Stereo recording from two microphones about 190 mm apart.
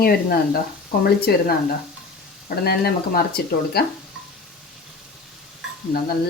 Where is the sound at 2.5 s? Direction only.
55° left (ahead or behind).